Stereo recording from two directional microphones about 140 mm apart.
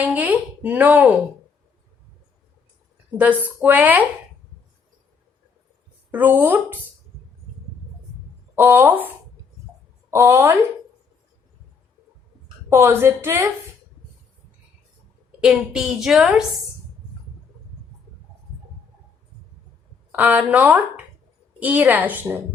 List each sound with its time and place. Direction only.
0.0 s speech: 10° right (ahead or behind)
3.2 s speech: 10° right (ahead or behind)
6.1 s speech: 15° right (ahead or behind)
8.5 s speech: 15° right (ahead or behind)
10.1 s speech: 20° right (ahead or behind)
12.7 s speech: 20° right (ahead or behind)
15.4 s a woman's voice: 5° right (ahead or behind)
20.1 s speech: 10° right (ahead or behind)